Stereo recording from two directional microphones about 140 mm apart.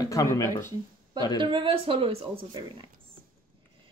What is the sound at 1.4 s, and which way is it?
Speech, 35° right (ahead or behind).